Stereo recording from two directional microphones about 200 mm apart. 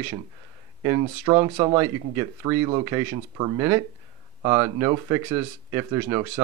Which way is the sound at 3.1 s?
25° right (ahead or behind).